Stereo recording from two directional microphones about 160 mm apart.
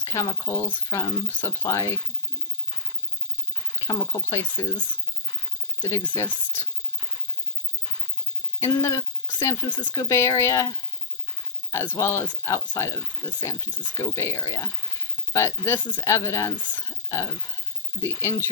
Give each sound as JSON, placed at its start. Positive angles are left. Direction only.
{"t": 0.0, "sound": "speech", "side_deg": 20}
{"t": 3.8, "sound": "speech", "side_deg": 20}
{"t": 5.8, "sound": "speech", "side_deg": 10}
{"t": 8.6, "sound": "speech", "side_deg": 15}
{"t": 9.6, "sound": "speech", "side_deg": 30}
{"t": 15.8, "sound": "speech", "side_deg": 30}
{"t": 16.0, "sound": "speech", "side_deg": 20}